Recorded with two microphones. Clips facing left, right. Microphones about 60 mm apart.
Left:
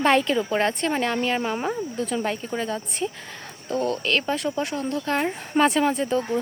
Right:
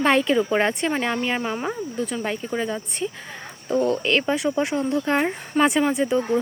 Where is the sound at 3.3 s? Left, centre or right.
Centre.